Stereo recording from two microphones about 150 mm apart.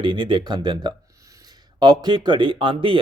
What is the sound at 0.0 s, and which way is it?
A man's voice, 30° right (ahead or behind).